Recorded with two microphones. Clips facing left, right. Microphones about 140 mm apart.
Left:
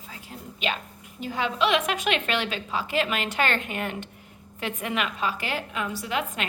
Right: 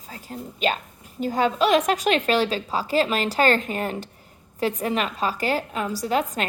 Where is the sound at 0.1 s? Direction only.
40° right (ahead or behind).